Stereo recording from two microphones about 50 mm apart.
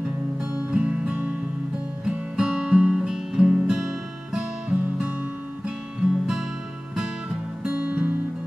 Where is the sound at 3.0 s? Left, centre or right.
Centre; by 5.1 s right.